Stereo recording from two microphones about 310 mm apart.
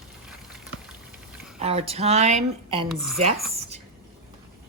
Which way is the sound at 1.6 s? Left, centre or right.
Centre.